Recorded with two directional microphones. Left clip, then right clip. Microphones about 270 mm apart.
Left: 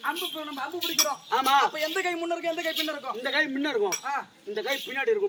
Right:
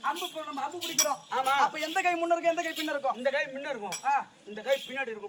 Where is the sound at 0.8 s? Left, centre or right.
Centre.